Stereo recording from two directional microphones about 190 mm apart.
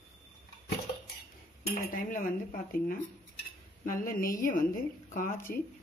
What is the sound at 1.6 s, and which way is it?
Speech, 45° left (ahead or behind).